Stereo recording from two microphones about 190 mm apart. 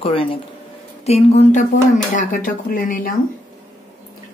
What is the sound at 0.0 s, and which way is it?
Speech, 30° left (ahead or behind).